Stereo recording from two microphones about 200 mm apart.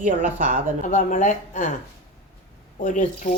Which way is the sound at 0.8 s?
40° left (ahead or behind).